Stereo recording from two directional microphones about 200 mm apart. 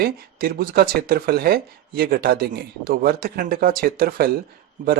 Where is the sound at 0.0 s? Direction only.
45° right (ahead or behind).